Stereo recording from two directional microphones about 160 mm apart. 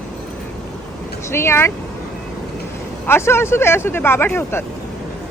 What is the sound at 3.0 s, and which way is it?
A woman's voice, 15° left (ahead or behind).